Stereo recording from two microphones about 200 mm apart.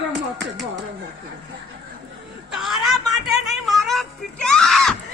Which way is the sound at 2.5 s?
Centre (ahead or behind).